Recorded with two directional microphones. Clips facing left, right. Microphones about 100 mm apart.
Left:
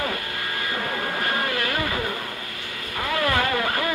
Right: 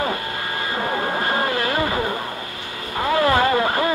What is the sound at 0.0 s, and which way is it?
Vehicle, 30° right (ahead or behind).